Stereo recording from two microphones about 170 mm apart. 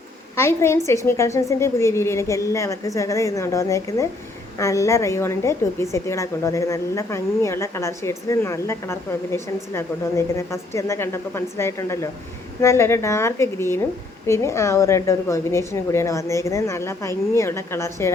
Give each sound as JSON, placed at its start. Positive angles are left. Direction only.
{"t": 0.3, "sound": "a woman's voice", "side_deg": 15}